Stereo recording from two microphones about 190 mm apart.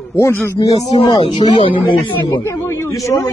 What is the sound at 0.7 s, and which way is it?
Speech, 35° left (ahead or behind).